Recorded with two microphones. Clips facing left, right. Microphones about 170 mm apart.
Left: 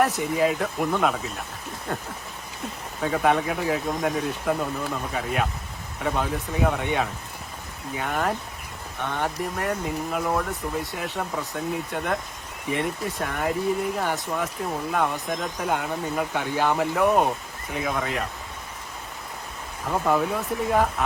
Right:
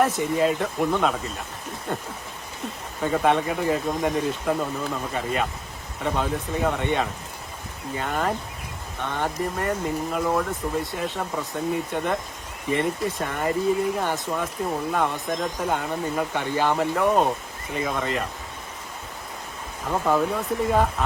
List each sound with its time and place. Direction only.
0.0 s speech: centre (ahead or behind)
7.9 s speech: centre (ahead or behind)
19.9 s speech: centre (ahead or behind)